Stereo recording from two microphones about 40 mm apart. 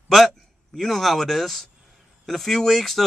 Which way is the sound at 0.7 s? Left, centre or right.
Centre.